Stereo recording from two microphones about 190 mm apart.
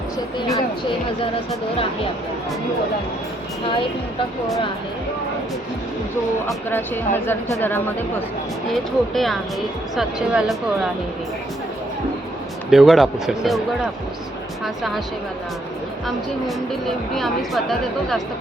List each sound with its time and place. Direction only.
0.3 s speech: 20° left (ahead or behind)
6.7 s speech: 10° left (ahead or behind)
8.7 s speech: centre (ahead or behind)
12.7 s speech: centre (ahead or behind)
14.6 s speech: centre (ahead or behind)
17.2 s speech: centre (ahead or behind)